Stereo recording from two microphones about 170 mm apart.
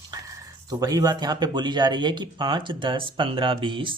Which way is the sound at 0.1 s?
20° right (ahead or behind).